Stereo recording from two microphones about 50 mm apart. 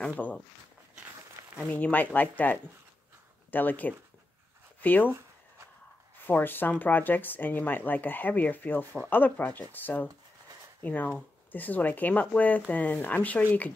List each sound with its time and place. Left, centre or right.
0.0 s speech: left
1.6 s speech: left
6.2 s speech: left